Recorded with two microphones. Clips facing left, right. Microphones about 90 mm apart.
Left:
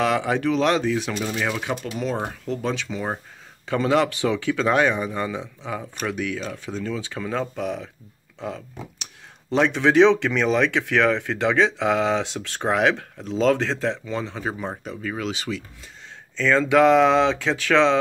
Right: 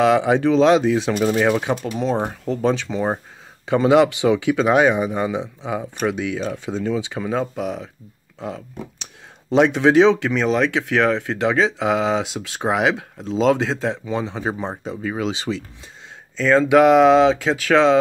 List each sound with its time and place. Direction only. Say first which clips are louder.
0.0 s speech: right 6 dB; 20° right (ahead or behind)
1.1 s speech: right 8 dB; 40° right (ahead or behind)
3.6 s speech: right 6 dB; 20° right (ahead or behind); by 8.6 s 5° right (ahead or behind)
9.7 s speech: even; 10° right (ahead or behind); by 15.6 s 25° right (ahead or behind)
16.3 s speech: right 4 dB; 10° right (ahead or behind)